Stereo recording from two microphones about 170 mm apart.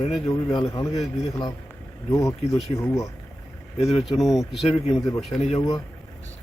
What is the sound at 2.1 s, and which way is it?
Speech, 20° left (ahead or behind).